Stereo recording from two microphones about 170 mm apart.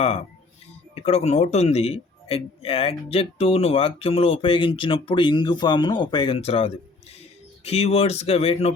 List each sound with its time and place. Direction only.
0.0 s a man's voice: 35° left (ahead or behind)